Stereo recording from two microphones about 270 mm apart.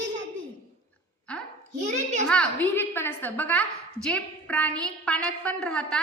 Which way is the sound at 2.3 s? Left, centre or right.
Centre.